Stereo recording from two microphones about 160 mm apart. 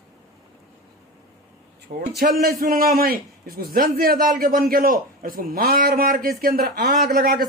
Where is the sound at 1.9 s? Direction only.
45° right (ahead or behind).